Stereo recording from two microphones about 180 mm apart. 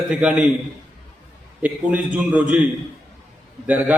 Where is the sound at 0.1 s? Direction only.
5° right (ahead or behind).